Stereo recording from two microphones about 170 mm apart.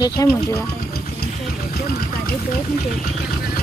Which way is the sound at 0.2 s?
20° left (ahead or behind).